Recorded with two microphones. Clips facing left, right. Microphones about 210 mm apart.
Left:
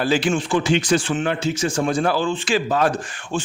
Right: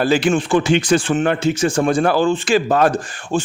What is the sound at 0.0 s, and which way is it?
A man's voice, 55° right (ahead or behind).